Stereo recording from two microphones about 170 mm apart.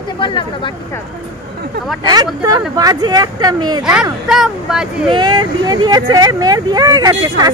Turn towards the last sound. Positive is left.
turn(degrees=-25)  # may be behind; listen again after turning